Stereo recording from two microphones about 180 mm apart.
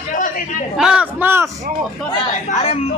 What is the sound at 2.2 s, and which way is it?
Speech, 35° left (ahead or behind).